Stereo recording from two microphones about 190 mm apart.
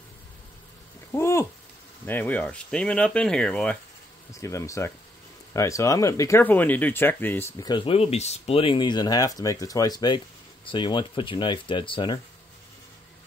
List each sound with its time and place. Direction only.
1.1 s a sound: 15° left (ahead or behind)
2.0 s speech: 10° left (ahead or behind)
4.3 s speech: 15° left (ahead or behind)